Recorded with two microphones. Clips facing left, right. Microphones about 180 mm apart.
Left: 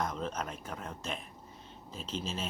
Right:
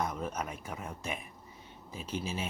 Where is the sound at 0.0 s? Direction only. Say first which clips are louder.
Even; 10° right (ahead or behind).